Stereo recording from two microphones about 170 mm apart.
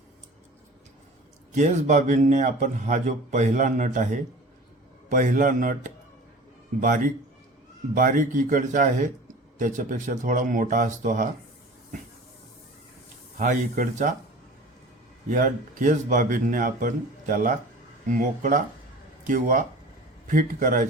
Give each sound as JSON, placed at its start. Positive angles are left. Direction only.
{"t": 1.5, "sound": "speech", "side_deg": -45}
{"t": 13.4, "sound": "speech", "side_deg": -50}
{"t": 15.3, "sound": "speech", "side_deg": -50}